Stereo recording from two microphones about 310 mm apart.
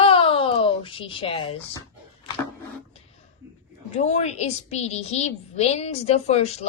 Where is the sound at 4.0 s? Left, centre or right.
Left.